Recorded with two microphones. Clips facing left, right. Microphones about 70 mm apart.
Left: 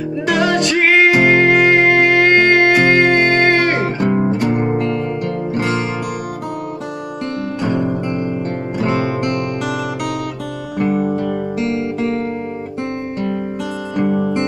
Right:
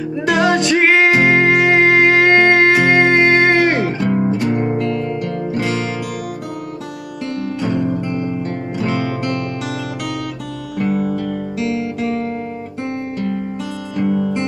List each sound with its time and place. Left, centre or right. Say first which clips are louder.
0.3 s music: right 1 dB; centre
3.7 s music: left 1 dB; left
7.6 s music: left 1 dB; left
10.8 s music: left 2 dB; left
14.0 s music: even; left